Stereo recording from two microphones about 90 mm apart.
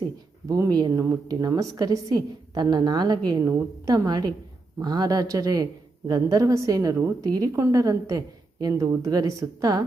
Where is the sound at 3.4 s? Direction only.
35° right (ahead or behind).